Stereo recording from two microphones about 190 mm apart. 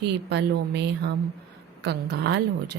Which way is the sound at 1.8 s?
65° right (ahead or behind).